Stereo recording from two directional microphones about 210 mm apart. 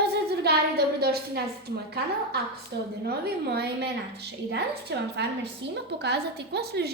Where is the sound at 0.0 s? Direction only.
50° right (ahead or behind).